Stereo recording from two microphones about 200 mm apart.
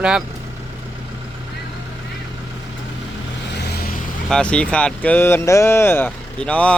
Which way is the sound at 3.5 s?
55° left (ahead or behind).